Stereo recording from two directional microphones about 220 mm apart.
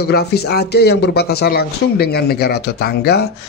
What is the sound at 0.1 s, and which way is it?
Speech, 45° left (ahead or behind).